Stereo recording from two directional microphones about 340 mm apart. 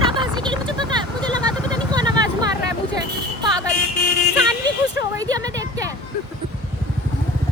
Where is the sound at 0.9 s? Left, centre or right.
Centre.